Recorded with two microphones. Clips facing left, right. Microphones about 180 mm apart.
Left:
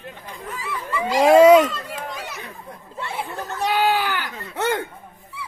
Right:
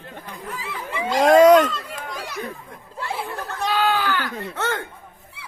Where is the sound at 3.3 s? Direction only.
20° left (ahead or behind).